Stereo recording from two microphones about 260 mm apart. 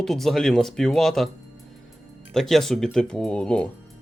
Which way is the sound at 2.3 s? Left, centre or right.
Centre.